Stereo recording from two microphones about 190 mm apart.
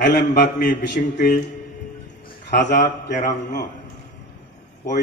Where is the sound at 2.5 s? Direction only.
65° left (ahead or behind).